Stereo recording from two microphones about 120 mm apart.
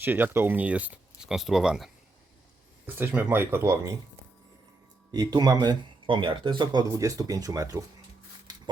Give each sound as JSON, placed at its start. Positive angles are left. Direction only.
{"t": 0.0, "sound": "speech", "side_deg": -15}
{"t": 2.8, "sound": "speech", "side_deg": -15}
{"t": 5.1, "sound": "speech", "side_deg": -35}
{"t": 6.9, "sound": "speech", "side_deg": -30}